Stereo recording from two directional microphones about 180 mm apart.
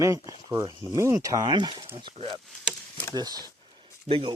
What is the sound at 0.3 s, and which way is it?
Speech, 20° right (ahead or behind).